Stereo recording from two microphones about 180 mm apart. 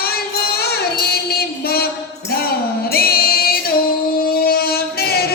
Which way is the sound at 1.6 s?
60° left (ahead or behind).